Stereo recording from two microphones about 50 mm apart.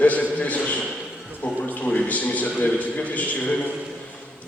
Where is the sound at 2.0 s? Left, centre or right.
Left.